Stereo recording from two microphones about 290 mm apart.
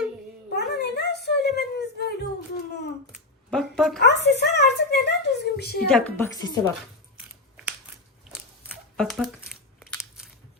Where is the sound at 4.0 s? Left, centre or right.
Left.